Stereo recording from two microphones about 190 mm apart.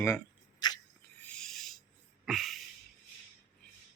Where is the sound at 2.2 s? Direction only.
Centre (ahead or behind).